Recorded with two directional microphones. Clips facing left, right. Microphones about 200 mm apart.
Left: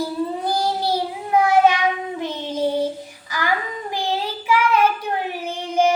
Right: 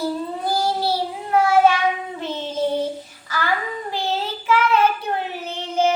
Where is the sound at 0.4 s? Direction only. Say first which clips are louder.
Right 3 dB; 15° left (ahead or behind).